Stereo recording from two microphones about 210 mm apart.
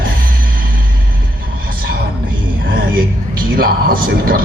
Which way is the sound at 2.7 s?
45° right (ahead or behind).